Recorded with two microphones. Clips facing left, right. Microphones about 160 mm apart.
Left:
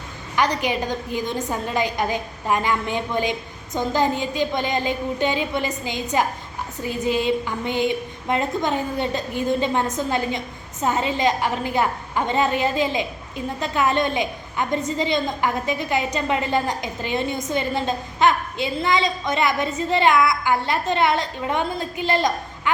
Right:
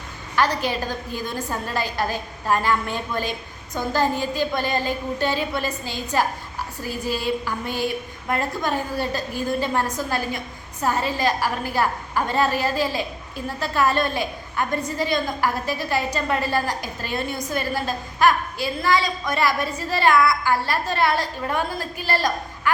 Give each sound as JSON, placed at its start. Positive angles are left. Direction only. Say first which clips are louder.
{"t": 0.3, "sound": "a woman's voice", "louder": "left 1 dB", "side_deg": 15}